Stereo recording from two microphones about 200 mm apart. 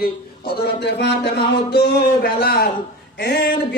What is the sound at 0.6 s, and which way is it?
Speech, 55° left (ahead or behind).